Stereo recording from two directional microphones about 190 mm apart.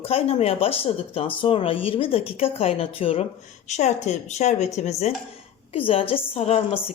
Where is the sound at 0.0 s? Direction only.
30° left (ahead or behind).